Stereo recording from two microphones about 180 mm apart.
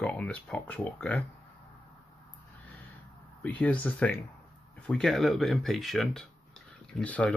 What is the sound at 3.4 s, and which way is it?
Speech, 10° left (ahead or behind).